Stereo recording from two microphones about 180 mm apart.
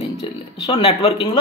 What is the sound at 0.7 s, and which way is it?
Speech, 35° left (ahead or behind).